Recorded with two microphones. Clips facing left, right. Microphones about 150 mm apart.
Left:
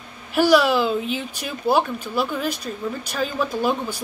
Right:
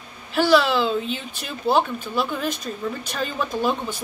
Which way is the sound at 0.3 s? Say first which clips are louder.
Left 2 dB; 10° left (ahead or behind).